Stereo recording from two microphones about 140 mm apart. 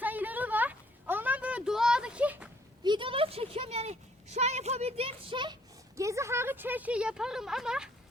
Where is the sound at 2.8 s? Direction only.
35° right (ahead or behind).